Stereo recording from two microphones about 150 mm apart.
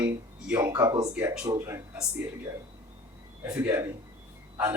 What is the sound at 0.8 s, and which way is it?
Speech, 20° right (ahead or behind).